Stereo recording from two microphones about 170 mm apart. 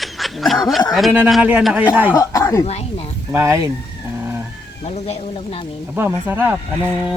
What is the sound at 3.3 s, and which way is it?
Speech, 15° right (ahead or behind).